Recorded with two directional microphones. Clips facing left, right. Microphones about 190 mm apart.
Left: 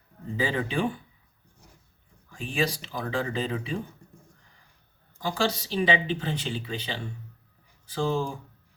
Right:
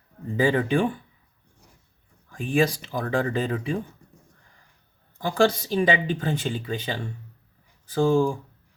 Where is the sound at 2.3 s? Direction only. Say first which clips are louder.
Right 6 dB; 50° right (ahead or behind).